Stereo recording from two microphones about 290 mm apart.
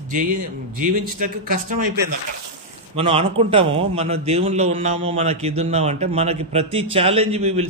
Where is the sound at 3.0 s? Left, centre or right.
Centre.